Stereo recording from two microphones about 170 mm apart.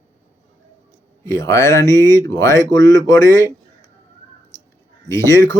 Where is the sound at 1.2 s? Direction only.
15° left (ahead or behind).